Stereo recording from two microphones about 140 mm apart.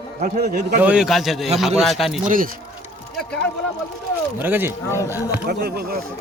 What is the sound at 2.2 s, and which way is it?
Speech, 75° right (ahead or behind).